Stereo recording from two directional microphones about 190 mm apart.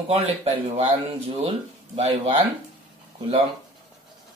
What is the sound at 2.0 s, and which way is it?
Speech, 35° right (ahead or behind).